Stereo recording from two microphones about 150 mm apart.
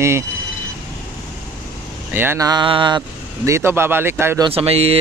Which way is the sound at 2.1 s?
20° right (ahead or behind).